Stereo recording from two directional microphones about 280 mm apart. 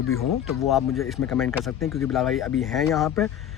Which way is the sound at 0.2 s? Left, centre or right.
Centre.